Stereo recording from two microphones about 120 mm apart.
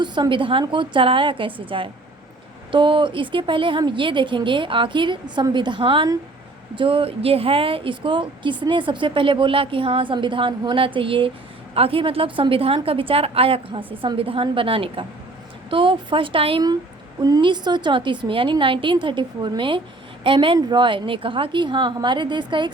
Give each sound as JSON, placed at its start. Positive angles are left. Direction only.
{"t": 0.0, "sound": "a woman's voice", "side_deg": -40}
{"t": 17.2, "sound": "a woman's voice", "side_deg": -35}